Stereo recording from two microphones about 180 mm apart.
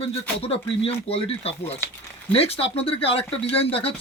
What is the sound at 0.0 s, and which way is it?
Speech, 30° left (ahead or behind).